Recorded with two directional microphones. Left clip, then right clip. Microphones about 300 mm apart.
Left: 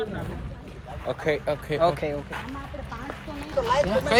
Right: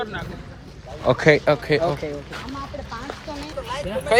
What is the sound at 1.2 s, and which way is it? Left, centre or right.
Speech, right.